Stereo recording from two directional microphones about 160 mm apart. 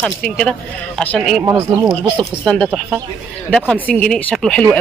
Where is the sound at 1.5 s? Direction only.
15° right (ahead or behind).